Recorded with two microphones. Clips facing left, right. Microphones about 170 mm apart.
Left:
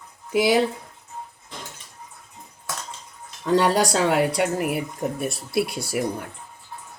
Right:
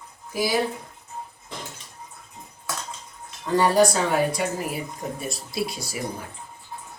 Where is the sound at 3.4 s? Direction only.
75° left (ahead or behind).